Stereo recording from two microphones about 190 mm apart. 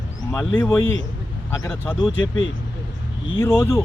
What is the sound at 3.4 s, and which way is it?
Speech, 15° left (ahead or behind).